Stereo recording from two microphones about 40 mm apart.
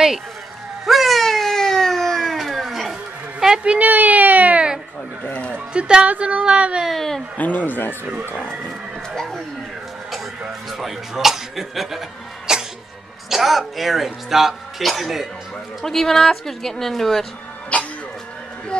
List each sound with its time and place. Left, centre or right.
0.8 s a sound: centre
3.6 s speech: right
3.9 s speech: right
5.3 s speech: left
5.7 s speech: right
6.9 s a woman's voice: centre
7.3 s speech: left
9.1 s a sound: centre
10.7 s a man's voice: centre
12.5 s cough: centre
13.3 s a man's voice: centre
15.8 s a woman's voice: centre
17.7 s music: left